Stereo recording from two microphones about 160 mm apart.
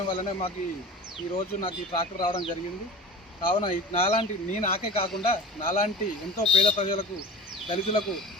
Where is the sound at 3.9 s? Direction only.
40° left (ahead or behind).